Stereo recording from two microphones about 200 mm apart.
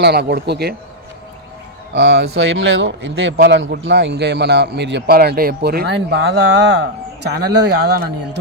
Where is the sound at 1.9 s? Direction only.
60° right (ahead or behind).